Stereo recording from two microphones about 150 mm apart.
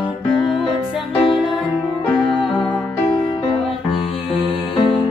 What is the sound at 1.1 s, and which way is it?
Music, 35° left (ahead or behind).